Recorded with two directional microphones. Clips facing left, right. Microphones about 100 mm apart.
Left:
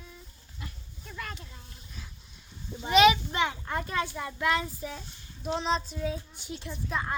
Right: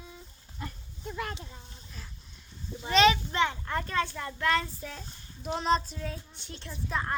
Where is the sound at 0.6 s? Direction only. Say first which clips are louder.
Right 5 dB; 35° right (ahead or behind).